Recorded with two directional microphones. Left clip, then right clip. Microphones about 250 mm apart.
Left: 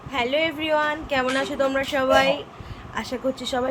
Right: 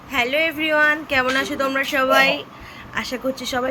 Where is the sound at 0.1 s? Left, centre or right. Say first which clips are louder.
Right 3 dB; centre.